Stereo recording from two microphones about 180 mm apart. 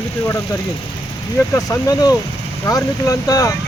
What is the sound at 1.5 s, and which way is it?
Speech, 20° left (ahead or behind).